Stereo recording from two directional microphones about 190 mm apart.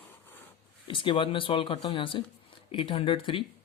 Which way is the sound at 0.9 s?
25° left (ahead or behind).